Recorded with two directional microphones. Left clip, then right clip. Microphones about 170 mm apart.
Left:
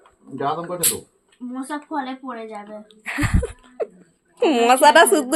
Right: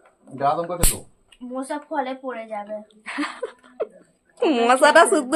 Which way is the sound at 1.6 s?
15° right (ahead or behind).